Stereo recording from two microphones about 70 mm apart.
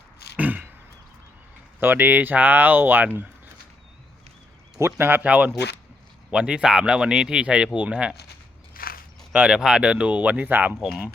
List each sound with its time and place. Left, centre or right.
0.3 s a sound: right
1.8 s speech: right
4.8 s speech: right
5.2 s speech: centre
9.3 s speech: centre
10.8 s speech: centre